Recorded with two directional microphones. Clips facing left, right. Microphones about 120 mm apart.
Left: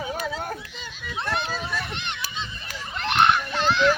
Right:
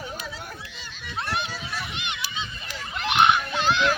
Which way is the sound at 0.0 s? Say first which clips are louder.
Left 6 dB; 70° left (ahead or behind).